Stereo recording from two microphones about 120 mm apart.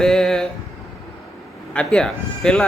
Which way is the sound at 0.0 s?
5° left (ahead or behind).